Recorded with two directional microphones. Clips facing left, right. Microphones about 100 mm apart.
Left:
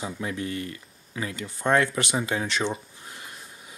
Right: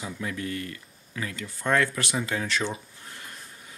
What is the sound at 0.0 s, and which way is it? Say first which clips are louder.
Speech: left 2 dB; 25° left (ahead or behind).